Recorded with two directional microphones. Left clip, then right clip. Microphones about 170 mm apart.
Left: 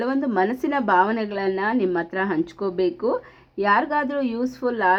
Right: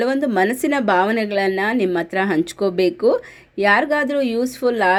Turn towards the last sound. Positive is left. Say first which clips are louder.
# right 4 dB
turn(degrees=-25)  # may be behind; listen again after turning